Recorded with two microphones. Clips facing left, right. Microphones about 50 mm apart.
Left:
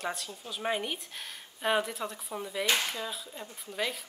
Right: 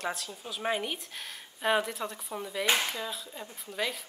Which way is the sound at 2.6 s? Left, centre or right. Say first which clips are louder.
Right 2 dB; centre.